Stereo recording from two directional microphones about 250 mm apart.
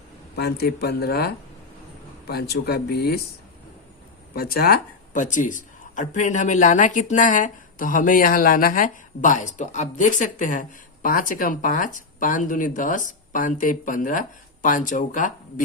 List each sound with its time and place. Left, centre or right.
0.3 s speech: left
4.4 s speech: left